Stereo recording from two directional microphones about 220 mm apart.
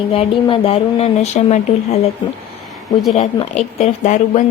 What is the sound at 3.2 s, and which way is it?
Speech, 30° left (ahead or behind).